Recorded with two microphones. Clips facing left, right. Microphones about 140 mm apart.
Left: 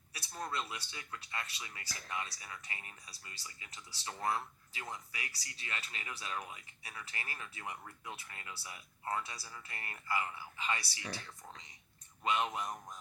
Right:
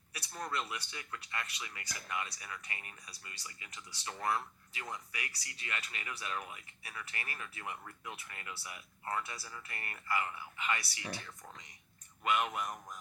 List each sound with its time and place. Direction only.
0.1 s a sound: 25° left (ahead or behind)
0.7 s speech: 25° left (ahead or behind)
12.2 s speech: 30° left (ahead or behind)